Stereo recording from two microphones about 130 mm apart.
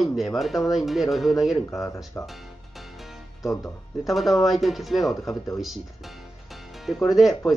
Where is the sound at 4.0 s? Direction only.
Centre (ahead or behind).